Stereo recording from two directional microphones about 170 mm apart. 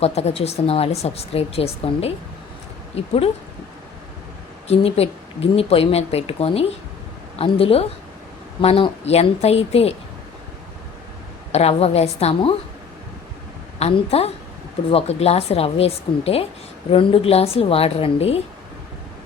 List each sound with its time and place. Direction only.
0.0 s speech: 40° left (ahead or behind)
4.7 s speech: 35° left (ahead or behind)
11.5 s speech: 40° left (ahead or behind)
13.7 s speech: 40° left (ahead or behind)